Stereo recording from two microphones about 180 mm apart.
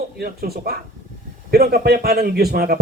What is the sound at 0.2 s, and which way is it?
A man's voice, 60° right (ahead or behind).